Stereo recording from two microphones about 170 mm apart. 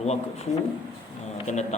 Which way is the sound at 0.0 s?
40° left (ahead or behind).